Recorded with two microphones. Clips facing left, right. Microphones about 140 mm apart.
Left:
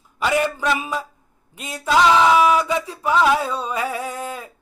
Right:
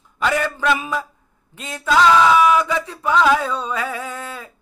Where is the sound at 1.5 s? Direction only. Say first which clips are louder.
Right 1 dB; 10° left (ahead or behind).